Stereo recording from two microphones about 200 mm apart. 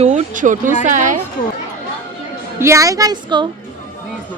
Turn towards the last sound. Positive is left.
turn(degrees=-20)  # may be behind; listen again after turning